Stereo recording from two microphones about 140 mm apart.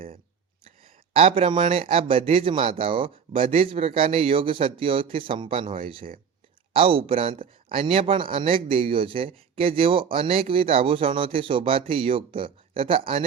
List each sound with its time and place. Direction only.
1.1 s speech: 40° right (ahead or behind)